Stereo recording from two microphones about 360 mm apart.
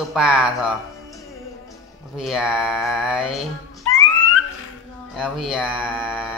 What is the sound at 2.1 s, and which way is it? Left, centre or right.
A man's voice, centre.